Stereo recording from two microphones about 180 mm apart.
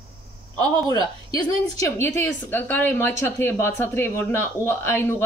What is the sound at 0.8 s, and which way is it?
A woman's voice, 20° left (ahead or behind).